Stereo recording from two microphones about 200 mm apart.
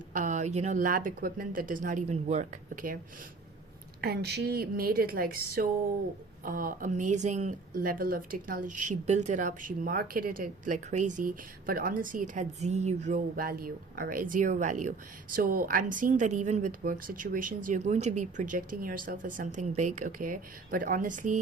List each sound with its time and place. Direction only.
0.1 s speech: 40° right (ahead or behind)
4.0 s a woman's voice: 55° right (ahead or behind)